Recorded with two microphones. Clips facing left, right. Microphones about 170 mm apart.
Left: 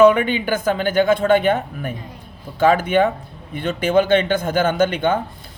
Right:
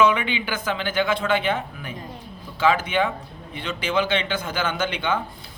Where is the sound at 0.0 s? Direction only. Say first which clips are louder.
Left 7 dB; 45° left (ahead or behind).